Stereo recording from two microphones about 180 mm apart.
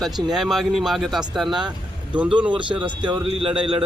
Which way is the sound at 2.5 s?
25° right (ahead or behind).